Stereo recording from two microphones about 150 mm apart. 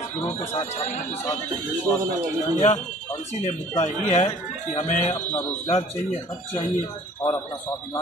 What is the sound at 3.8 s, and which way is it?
Speech, 45° left (ahead or behind).